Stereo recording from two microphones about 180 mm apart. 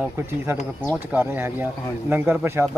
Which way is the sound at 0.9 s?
10° right (ahead or behind).